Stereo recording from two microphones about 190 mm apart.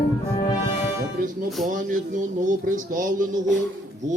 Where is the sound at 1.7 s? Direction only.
45° right (ahead or behind).